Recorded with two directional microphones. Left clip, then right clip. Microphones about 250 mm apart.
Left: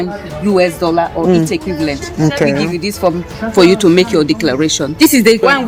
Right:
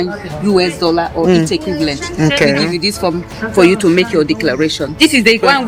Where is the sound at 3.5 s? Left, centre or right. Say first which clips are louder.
Left 1 dB; left.